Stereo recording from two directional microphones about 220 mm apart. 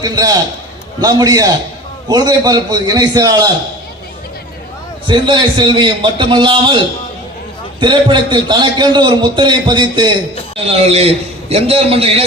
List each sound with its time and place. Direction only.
0.0 s a man's voice: 15° right (ahead or behind)
5.0 s a man's voice: 20° right (ahead or behind)
7.8 s a man's voice: 20° right (ahead or behind)